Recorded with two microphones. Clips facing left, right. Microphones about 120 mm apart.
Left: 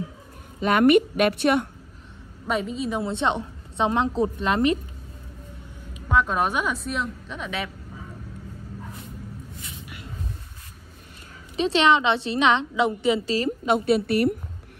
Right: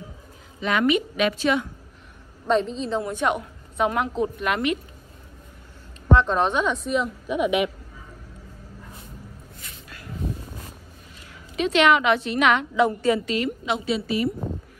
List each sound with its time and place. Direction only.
0.6 s a woman's voice: 50° left (ahead or behind)
2.4 s a woman's voice: 10° left (ahead or behind)
3.0 s a woman's voice: 25° left (ahead or behind)
6.0 s speech: 5° left (ahead or behind)
7.2 s speech: 15° right (ahead or behind)
9.8 s vehicle: 20° left (ahead or behind)
11.5 s a woman's voice: 30° left (ahead or behind)
13.7 s a woman's voice: 55° left (ahead or behind)